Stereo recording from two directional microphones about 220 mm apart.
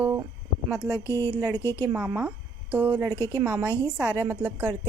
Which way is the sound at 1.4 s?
15° right (ahead or behind).